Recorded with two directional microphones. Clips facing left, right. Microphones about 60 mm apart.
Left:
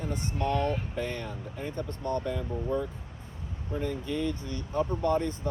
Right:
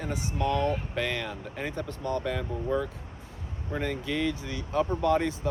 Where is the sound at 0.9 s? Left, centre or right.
Right.